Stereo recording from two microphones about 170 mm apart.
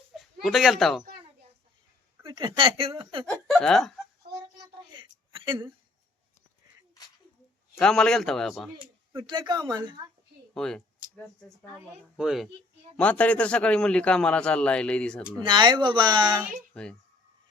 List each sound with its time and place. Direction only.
0.4 s speech: centre (ahead or behind)
2.2 s a woman's voice: 30° right (ahead or behind)
3.2 s speech: 5° left (ahead or behind)
4.9 s a sound: 30° right (ahead or behind)
7.8 s speech: 5° left (ahead or behind)
9.2 s speech: 25° right (ahead or behind)
10.5 s speech: 5° left (ahead or behind)
13.0 s a man's voice: 10° left (ahead or behind)
15.4 s speech: 25° right (ahead or behind)
16.7 s speech: 5° left (ahead or behind)